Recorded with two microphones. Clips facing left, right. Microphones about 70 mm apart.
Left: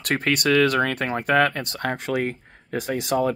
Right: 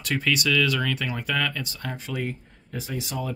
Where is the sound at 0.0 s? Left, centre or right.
Left.